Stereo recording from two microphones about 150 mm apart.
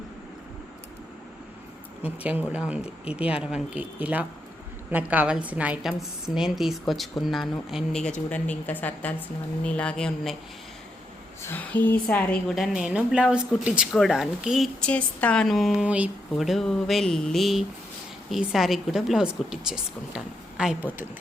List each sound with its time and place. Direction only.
2.0 s a woman's voice: 10° right (ahead or behind)
8.3 s speech: 10° left (ahead or behind)
11.4 s a woman's voice: 10° left (ahead or behind); by 20.7 s 5° right (ahead or behind)